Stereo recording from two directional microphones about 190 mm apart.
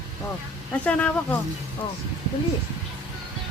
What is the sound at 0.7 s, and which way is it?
Speech, 5° left (ahead or behind).